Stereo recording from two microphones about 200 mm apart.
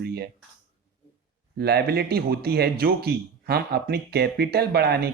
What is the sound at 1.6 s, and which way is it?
A man's voice, 50° right (ahead or behind).